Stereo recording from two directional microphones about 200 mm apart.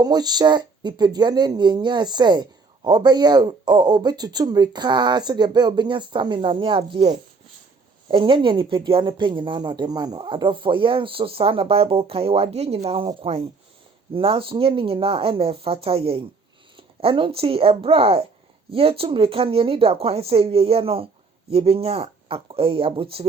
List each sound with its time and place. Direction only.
0.0 s speech: 20° right (ahead or behind)